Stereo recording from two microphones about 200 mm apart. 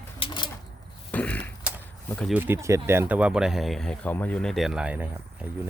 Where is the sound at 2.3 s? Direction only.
10° right (ahead or behind).